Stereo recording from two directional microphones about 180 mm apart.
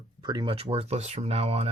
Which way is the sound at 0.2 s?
25° right (ahead or behind).